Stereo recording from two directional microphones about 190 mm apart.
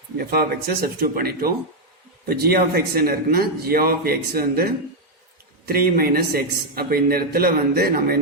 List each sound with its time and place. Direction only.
0.2 s a man's voice: 55° right (ahead or behind)